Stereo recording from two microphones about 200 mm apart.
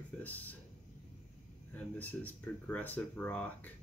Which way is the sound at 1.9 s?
10° left (ahead or behind).